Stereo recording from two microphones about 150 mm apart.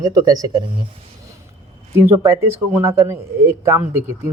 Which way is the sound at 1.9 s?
15° right (ahead or behind).